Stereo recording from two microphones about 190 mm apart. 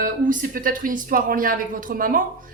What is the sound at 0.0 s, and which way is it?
Speech, 45° right (ahead or behind).